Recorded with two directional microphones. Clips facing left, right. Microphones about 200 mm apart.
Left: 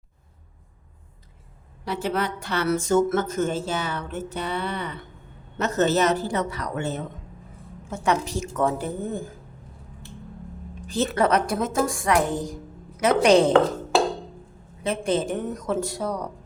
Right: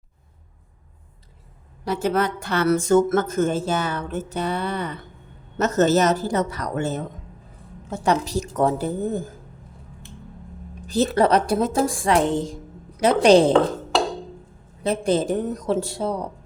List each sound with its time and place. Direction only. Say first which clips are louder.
1.8 s a woman's voice: right 4 dB; 45° right (ahead or behind)
10.8 s a woman's voice: right 3 dB; 35° right (ahead or behind)
14.8 s a woman's voice: right 3 dB; 35° right (ahead or behind)